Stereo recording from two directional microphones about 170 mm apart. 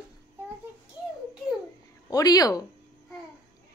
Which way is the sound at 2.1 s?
20° left (ahead or behind).